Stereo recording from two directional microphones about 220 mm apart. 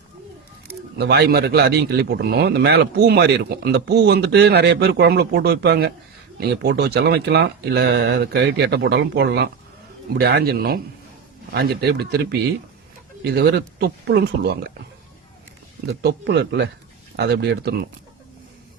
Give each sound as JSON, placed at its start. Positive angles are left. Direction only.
{"t": 0.9, "sound": "a man's voice", "side_deg": -50}
{"t": 15.9, "sound": "a man's voice", "side_deg": -50}